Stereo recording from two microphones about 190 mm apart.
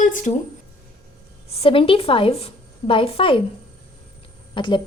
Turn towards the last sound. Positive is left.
turn(degrees=25)  # may be behind; listen again after turning